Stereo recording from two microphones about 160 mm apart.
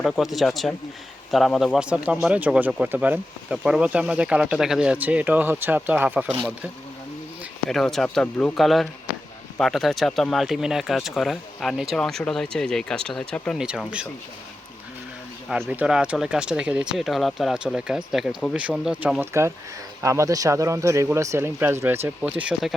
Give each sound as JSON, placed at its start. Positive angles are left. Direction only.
{"t": 0.0, "sound": "speech", "side_deg": 0}
{"t": 7.7, "sound": "speech", "side_deg": 0}
{"t": 13.6, "sound": "speech", "side_deg": -5}
{"t": 15.4, "sound": "speech", "side_deg": -10}